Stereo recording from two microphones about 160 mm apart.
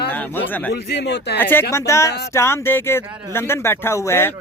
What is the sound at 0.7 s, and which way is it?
Speech, 90° left.